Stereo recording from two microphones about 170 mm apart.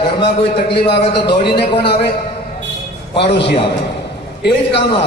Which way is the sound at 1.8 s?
70° left (ahead or behind).